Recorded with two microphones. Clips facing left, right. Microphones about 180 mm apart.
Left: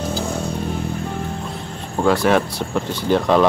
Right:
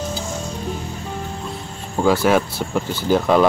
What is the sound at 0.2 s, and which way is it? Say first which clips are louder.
Music: left 4 dB; 60° left (ahead or behind).